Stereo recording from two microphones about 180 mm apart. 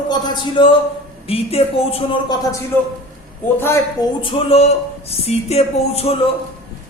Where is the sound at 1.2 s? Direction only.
35° left (ahead or behind).